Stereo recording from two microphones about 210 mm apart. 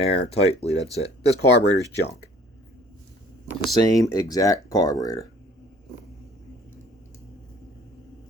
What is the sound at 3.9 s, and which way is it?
Speech, 15° left (ahead or behind).